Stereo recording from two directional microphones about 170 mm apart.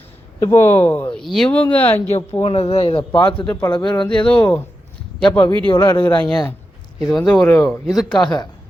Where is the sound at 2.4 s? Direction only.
35° left (ahead or behind).